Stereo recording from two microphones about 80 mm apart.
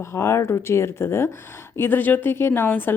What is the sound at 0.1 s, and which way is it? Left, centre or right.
A woman's voice, left.